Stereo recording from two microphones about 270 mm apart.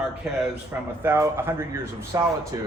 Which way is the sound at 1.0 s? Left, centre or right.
Centre.